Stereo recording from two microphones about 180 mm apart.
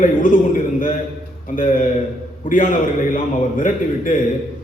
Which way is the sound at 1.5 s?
45° left (ahead or behind).